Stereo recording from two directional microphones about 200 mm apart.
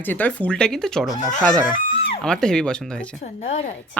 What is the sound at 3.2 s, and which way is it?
Speech, 35° left (ahead or behind).